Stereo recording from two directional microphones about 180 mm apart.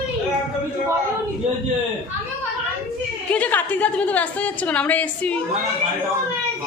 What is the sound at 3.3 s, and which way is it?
A woman's voice, 10° left (ahead or behind).